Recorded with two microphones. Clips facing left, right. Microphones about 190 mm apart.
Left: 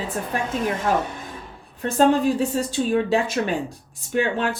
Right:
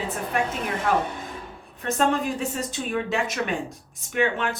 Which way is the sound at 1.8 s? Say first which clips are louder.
Left 5 dB; 35° left (ahead or behind).